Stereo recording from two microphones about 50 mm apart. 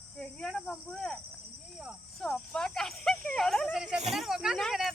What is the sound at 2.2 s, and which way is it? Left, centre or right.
Speech, centre.